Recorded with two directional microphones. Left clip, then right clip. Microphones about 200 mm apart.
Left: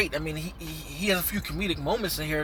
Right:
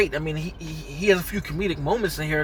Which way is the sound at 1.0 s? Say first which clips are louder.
Right 6 dB; 15° left (ahead or behind).